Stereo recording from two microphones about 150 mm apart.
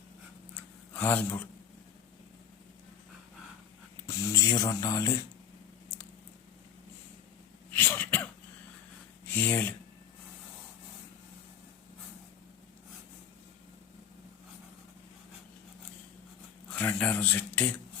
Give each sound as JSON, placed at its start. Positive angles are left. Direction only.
{"t": 0.5, "sound": "a sound", "side_deg": 10}
{"t": 4.0, "sound": "speech", "side_deg": 25}
{"t": 7.7, "sound": "throat clearing", "side_deg": 15}
{"t": 9.2, "sound": "speech", "side_deg": 15}
{"t": 16.6, "sound": "speech", "side_deg": 10}